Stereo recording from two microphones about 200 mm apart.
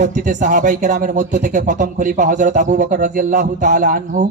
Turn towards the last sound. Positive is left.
turn(degrees=-40)  # may be behind; listen again after turning